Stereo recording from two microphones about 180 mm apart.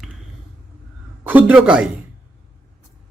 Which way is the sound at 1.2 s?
10° right (ahead or behind).